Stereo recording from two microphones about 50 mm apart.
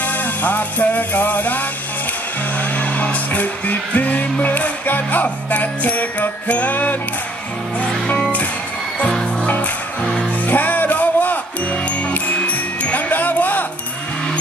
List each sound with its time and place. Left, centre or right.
0.0 s music: left
8.2 s music: left
13.1 s a sound: left